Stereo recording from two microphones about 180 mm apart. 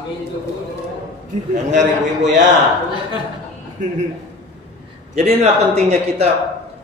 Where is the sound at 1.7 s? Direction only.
45° right (ahead or behind).